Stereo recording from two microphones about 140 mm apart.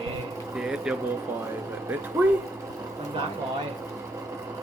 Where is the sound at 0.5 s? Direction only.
5° right (ahead or behind).